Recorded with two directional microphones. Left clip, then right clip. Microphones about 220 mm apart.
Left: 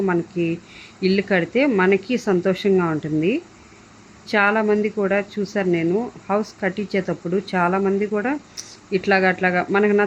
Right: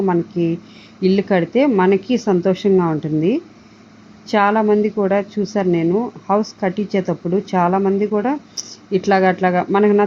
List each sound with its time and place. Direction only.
0.0 s speech: 5° right (ahead or behind)